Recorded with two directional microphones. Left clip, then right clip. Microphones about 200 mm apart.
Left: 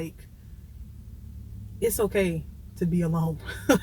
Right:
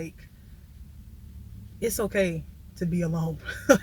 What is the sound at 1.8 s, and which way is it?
Speech, 20° right (ahead or behind).